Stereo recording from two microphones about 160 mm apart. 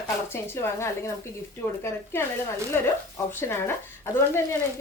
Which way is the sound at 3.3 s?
15° left (ahead or behind).